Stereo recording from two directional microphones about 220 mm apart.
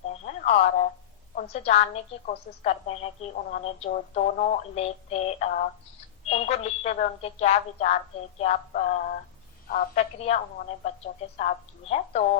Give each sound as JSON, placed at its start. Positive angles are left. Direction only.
{"t": 0.1, "sound": "telephone", "side_deg": 30}
{"t": 1.4, "sound": "a woman's voice", "side_deg": 30}